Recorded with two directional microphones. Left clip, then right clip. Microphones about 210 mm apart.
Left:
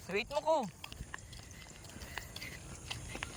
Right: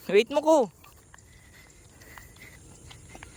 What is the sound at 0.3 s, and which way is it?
Speech, 85° right.